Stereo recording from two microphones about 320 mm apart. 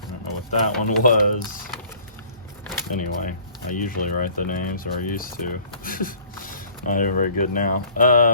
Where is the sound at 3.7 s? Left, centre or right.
Left.